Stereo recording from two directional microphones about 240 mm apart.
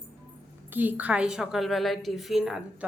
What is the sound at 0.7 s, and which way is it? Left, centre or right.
A woman's voice, centre.